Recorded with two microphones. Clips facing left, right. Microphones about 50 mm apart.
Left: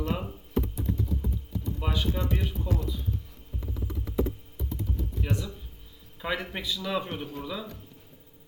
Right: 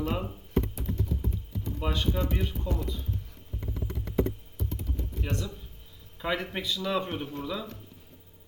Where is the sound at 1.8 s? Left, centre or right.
Centre.